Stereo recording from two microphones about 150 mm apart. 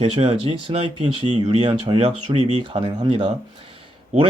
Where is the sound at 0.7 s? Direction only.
50° right (ahead or behind).